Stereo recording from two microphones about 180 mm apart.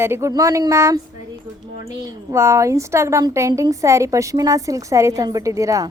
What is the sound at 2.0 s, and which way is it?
A woman's voice, 15° right (ahead or behind).